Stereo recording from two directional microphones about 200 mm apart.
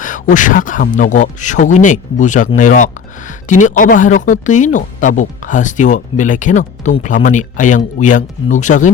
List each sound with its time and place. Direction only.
0.0 s speech: 40° left (ahead or behind)